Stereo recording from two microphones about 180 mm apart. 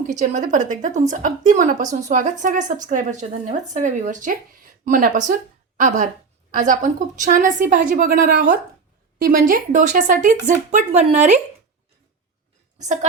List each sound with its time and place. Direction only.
0.1 s a woman's voice: 45° right (ahead or behind)
9.2 s a woman's voice: 50° right (ahead or behind)